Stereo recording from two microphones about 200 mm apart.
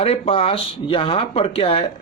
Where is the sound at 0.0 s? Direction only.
30° left (ahead or behind).